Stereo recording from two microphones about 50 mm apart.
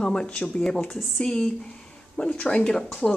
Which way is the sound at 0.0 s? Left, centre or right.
Centre.